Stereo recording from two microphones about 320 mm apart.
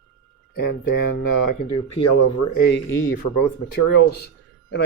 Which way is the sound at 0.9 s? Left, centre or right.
Left.